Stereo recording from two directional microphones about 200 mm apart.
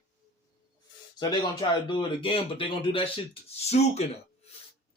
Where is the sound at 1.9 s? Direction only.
25° left (ahead or behind).